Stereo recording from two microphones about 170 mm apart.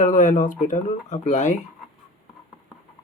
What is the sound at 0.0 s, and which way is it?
Speech, 50° left (ahead or behind).